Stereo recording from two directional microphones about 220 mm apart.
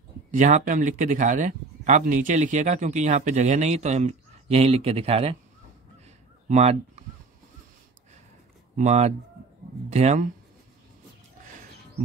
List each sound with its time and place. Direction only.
0.3 s speech: 35° right (ahead or behind)
6.5 s speech: 30° right (ahead or behind)
8.7 s speech: 30° right (ahead or behind)